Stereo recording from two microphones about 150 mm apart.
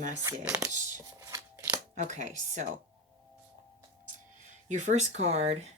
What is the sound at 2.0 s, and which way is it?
Speech, 55° right (ahead or behind).